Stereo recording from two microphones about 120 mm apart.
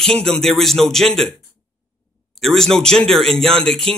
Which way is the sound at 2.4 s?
5° left (ahead or behind).